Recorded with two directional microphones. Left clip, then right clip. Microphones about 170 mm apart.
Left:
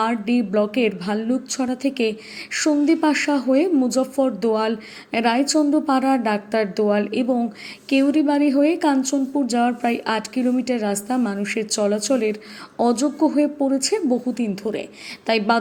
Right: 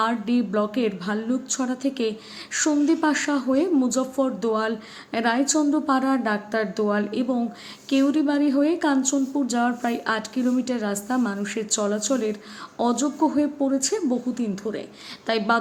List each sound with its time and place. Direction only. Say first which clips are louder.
0.0 s a woman's voice: left 2 dB; 15° left (ahead or behind)